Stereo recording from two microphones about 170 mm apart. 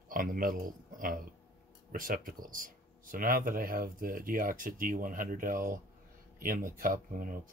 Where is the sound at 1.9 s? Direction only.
55° right (ahead or behind).